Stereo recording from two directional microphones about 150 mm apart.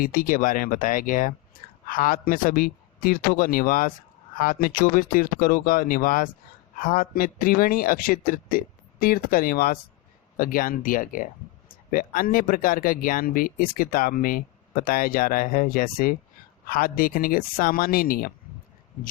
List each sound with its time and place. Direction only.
0.0 s speech: 70° left (ahead or behind)